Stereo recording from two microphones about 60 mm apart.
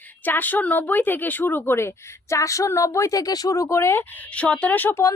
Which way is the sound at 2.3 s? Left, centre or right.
Left.